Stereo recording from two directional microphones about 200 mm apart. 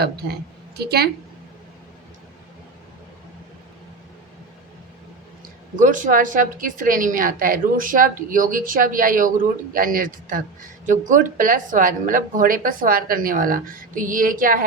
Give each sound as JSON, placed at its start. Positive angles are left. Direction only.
{"t": 0.8, "sound": "a woman's voice", "side_deg": -55}
{"t": 5.8, "sound": "a woman's voice", "side_deg": -40}